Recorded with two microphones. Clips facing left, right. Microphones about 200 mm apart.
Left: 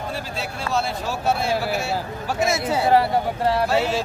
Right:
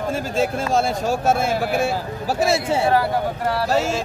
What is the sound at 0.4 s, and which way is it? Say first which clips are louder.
Speech: right 6 dB; 45° right (ahead or behind).